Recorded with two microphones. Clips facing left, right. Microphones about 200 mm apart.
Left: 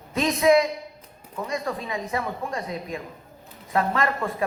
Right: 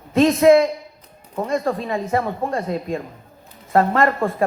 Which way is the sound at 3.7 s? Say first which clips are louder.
Right 7 dB; 45° right (ahead or behind).